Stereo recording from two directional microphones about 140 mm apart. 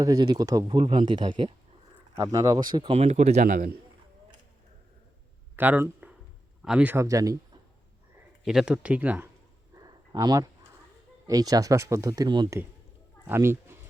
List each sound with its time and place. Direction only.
0.0 s speech: 30° right (ahead or behind)
0.8 s speech: 40° right (ahead or behind)
2.2 s speech: 25° right (ahead or behind)
2.9 s speech: 50° right (ahead or behind)
3.4 s a man's voice: 75° right (ahead or behind)
5.5 s a sound: 15° right (ahead or behind)
6.6 s speech: 5° right (ahead or behind)
6.9 s speech: 25° right (ahead or behind)
8.4 s speech: 5° right (ahead or behind)
9.7 s a sound: 25° right (ahead or behind)
11.3 s speech: 25° right (ahead or behind)
13.2 s speech: 15° right (ahead or behind)